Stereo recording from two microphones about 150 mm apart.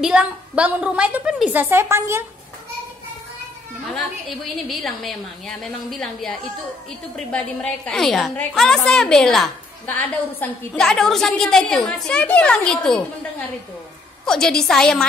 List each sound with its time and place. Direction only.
0.0 s a woman's voice: 5° right (ahead or behind)
4.6 s a woman's voice: centre (ahead or behind)
14.2 s a woman's voice: 5° left (ahead or behind)